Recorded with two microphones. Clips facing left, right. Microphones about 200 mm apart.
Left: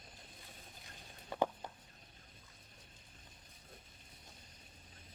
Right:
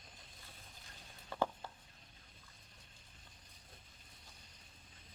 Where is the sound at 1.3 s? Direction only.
15° left (ahead or behind).